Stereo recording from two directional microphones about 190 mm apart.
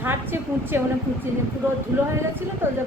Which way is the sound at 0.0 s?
10° right (ahead or behind).